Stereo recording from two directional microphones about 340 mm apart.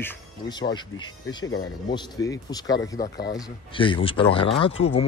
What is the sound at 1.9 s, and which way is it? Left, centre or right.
Speech, centre.